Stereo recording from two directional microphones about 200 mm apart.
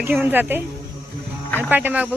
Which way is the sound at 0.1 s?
10° right (ahead or behind).